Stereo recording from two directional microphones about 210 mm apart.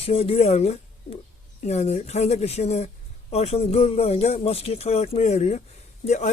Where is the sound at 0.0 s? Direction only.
30° left (ahead or behind).